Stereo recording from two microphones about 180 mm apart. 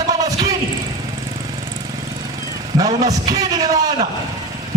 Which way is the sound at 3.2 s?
20° right (ahead or behind).